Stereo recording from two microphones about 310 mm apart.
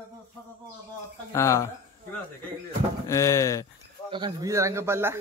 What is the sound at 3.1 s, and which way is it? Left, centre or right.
Speech, centre.